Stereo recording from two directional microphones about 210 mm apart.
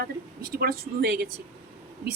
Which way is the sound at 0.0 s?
45° right (ahead or behind).